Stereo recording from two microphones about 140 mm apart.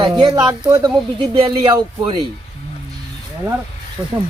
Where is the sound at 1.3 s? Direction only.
45° right (ahead or behind).